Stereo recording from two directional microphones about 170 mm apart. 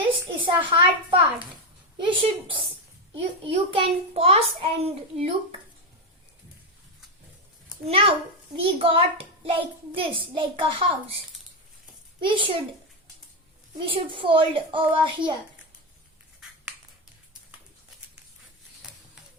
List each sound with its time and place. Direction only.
0.3 s a sound: 30° right (ahead or behind)
2.0 s a child's voice: 30° right (ahead or behind)
7.9 s a child's voice: 35° right (ahead or behind)
12.2 s a child's voice: 30° right (ahead or behind)
13.7 s a child's voice: 30° right (ahead or behind)